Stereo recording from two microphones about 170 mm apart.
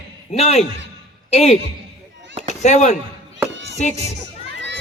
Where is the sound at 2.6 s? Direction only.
45° left (ahead or behind).